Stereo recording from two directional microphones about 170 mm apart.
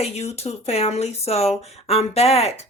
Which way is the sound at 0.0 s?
40° left (ahead or behind).